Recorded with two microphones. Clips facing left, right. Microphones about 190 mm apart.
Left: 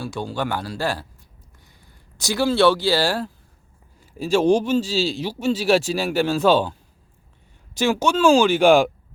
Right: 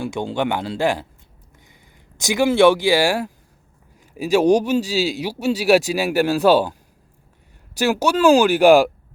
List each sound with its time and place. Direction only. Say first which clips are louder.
0.0 s speech: right 4 dB; 20° right (ahead or behind)
2.2 s speech: right 3 dB; 15° right (ahead or behind)
7.8 s speech: right 1 dB; 10° right (ahead or behind)